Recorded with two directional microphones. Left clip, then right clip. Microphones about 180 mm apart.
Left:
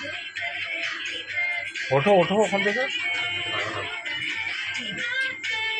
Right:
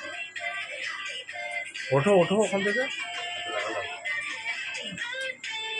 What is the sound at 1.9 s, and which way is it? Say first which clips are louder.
Speech: left 3 dB; 10° right (ahead or behind).